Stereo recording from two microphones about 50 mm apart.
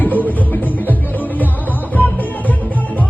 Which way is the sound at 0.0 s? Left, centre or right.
Left.